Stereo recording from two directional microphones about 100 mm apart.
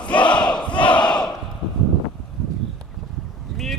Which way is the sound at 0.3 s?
10° left (ahead or behind).